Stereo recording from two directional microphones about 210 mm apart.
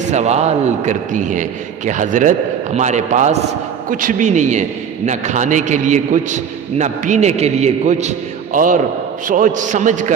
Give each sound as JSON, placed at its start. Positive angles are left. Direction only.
{"t": 0.1, "sound": "a man's voice", "side_deg": -30}